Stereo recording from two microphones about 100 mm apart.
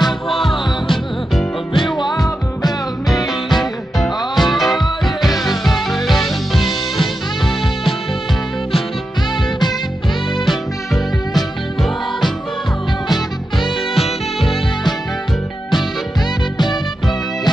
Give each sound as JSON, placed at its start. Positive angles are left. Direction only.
{"t": 0.0, "sound": "music", "side_deg": 0}
{"t": 2.0, "sound": "music", "side_deg": 50}
{"t": 3.1, "sound": "music", "side_deg": 0}
{"t": 11.3, "sound": "music", "side_deg": 0}